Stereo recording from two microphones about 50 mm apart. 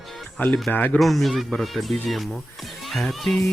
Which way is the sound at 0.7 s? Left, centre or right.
Left.